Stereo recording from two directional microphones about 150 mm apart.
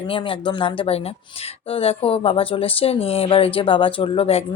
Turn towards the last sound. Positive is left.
turn(degrees=40)  # may be behind; listen again after turning